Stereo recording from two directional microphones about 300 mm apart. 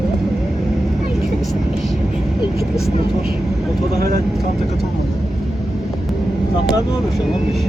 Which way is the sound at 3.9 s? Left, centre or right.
Right.